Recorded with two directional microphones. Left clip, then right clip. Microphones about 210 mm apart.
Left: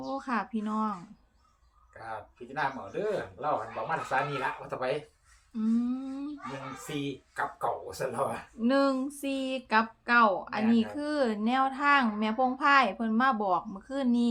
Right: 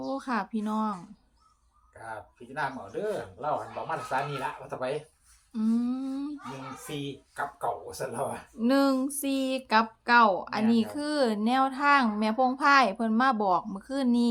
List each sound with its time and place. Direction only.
0.0 s speech: 20° right (ahead or behind)
1.9 s speech: centre (ahead or behind)
5.5 s humming: 30° right (ahead or behind)
6.8 s speech: centre (ahead or behind)
8.5 s speech: 30° right (ahead or behind)